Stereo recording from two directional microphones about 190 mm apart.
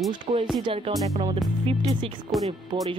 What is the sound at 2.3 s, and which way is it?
Speech, centre (ahead or behind).